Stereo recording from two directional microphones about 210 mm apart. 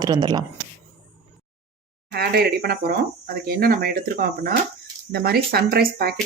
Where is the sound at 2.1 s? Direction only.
50° right (ahead or behind).